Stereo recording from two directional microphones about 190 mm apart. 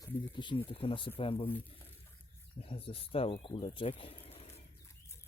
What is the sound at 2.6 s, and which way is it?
Speech, 30° left (ahead or behind).